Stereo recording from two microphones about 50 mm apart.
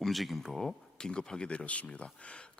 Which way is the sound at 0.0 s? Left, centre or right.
Centre.